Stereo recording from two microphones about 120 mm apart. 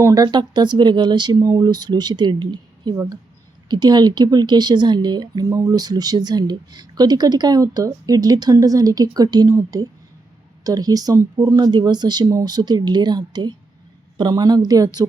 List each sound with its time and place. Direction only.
0.0 s speech: 30° right (ahead or behind)